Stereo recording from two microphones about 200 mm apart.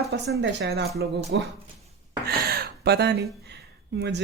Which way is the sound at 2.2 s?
50° right (ahead or behind).